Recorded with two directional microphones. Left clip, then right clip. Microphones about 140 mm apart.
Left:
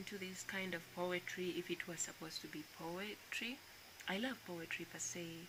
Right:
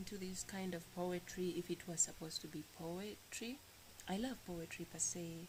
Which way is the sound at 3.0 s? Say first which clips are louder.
Left 4 dB; 35° right (ahead or behind).